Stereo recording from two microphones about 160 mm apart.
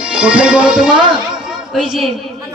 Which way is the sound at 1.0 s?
30° right (ahead or behind).